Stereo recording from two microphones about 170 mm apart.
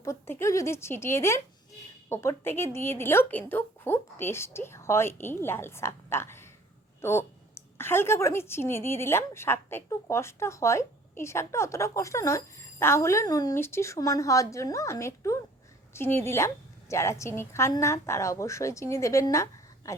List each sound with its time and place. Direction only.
0.0 s a woman's voice: 15° left (ahead or behind)